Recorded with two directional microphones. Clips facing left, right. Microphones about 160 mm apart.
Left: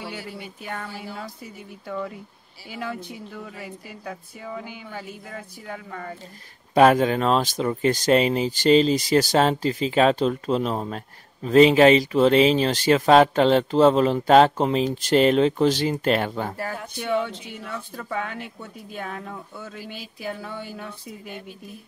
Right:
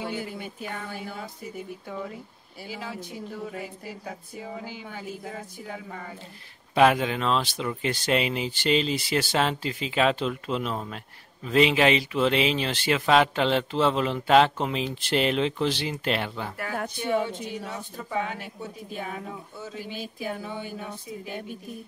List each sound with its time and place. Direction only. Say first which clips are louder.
0.0 s a sound: right 2 dB; 50° right (ahead or behind)
0.8 s speech: left 1 dB; 50° right (ahead or behind)
2.7 s speech: left 4 dB; 55° left (ahead or behind)
6.7 s speech: left 4 dB; 40° left (ahead or behind)
17.1 s speech: left 2 dB; 50° right (ahead or behind)
17.6 s speech: left 3 dB; 55° left (ahead or behind)